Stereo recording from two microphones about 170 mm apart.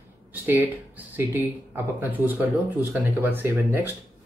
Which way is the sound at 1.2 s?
10° right (ahead or behind).